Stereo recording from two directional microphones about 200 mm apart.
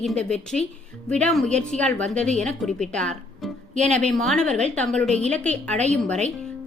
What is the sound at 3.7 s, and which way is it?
Speech, 35° right (ahead or behind).